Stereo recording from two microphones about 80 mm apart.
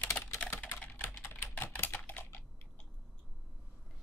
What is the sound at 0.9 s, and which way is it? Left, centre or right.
Typing, left.